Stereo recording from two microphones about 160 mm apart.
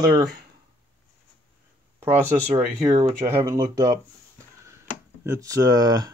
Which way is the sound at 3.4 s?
20° right (ahead or behind).